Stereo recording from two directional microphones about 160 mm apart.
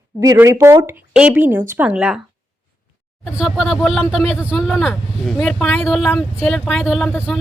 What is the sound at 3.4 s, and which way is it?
Speech, centre (ahead or behind).